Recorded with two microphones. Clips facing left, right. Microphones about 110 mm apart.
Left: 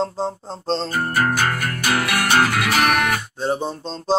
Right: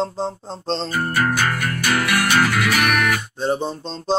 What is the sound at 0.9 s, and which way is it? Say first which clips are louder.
Music: right 1 dB; 40° left (ahead or behind).